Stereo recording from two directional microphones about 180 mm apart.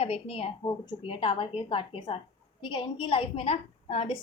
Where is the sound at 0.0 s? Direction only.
30° left (ahead or behind).